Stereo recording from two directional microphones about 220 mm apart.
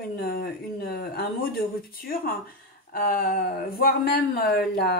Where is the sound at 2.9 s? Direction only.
40° left (ahead or behind).